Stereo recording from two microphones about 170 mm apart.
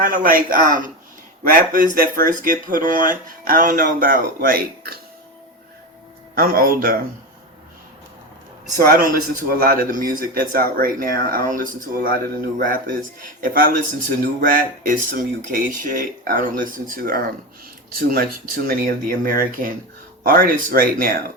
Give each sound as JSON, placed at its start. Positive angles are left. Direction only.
{"t": 0.0, "sound": "a man's voice", "side_deg": -55}
{"t": 6.3, "sound": "a man's voice", "side_deg": -60}
{"t": 8.8, "sound": "a man's voice", "side_deg": -60}